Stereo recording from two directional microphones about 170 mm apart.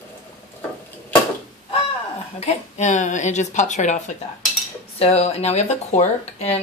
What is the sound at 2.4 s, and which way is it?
A woman's voice, 40° left (ahead or behind).